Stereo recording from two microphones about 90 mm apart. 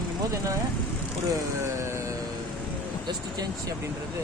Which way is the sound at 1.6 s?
35° right (ahead or behind).